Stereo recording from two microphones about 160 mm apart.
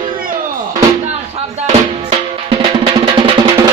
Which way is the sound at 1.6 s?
35° right (ahead or behind).